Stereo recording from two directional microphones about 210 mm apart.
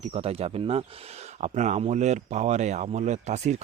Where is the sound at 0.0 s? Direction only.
30° right (ahead or behind).